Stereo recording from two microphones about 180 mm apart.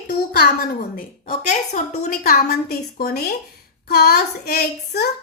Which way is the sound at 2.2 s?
55° left (ahead or behind).